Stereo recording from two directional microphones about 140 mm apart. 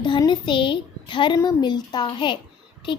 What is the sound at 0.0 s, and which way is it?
A child's voice, 30° left (ahead or behind).